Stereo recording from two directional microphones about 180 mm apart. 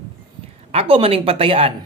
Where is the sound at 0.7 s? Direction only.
30° right (ahead or behind).